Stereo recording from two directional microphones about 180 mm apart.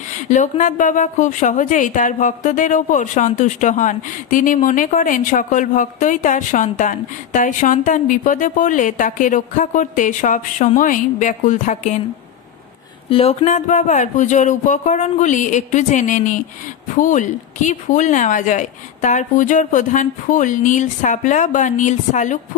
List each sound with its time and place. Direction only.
0.3 s a woman's voice: 45° left (ahead or behind)
13.1 s a woman's voice: 35° left (ahead or behind)